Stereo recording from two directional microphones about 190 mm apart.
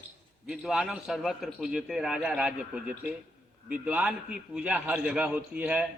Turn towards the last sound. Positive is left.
turn(degrees=-5)  # may be behind; listen again after turning